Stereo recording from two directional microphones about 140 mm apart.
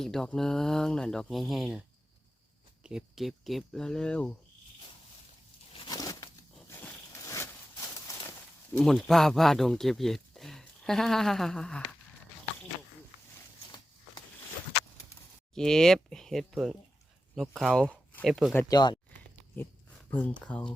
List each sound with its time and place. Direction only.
0.0 s speech: 5° left (ahead or behind)
2.8 s speech: 5° right (ahead or behind)
5.7 s a sound: 30° left (ahead or behind)
8.7 s speech: 5° left (ahead or behind)
15.5 s speech: 5° left (ahead or behind)
18.7 s speech: 30° left (ahead or behind)
20.1 s speech: 15° left (ahead or behind)